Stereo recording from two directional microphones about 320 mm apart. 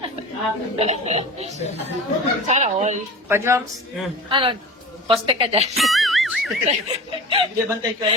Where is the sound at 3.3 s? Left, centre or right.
Centre.